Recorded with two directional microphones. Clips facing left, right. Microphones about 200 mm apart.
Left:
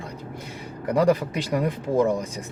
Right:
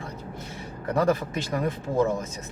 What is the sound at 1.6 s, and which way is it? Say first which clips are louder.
Speech: left 2 dB; 15° left (ahead or behind).